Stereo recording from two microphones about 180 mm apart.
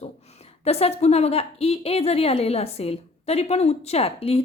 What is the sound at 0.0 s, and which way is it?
A woman's voice, 35° left (ahead or behind).